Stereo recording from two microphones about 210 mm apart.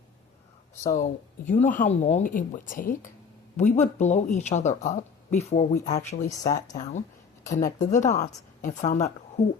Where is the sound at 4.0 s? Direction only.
35° left (ahead or behind).